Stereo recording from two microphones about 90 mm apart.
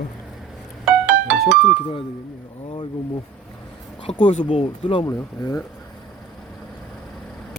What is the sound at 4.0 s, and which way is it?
Speech, 85° left.